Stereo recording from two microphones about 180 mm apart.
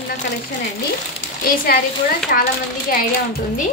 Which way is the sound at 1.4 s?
55° left (ahead or behind).